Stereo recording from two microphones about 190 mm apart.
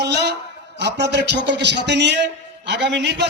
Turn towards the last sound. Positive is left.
turn(degrees=-65)  # may be behind; listen again after turning